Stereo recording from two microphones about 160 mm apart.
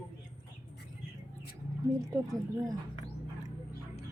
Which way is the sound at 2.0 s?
20° right (ahead or behind).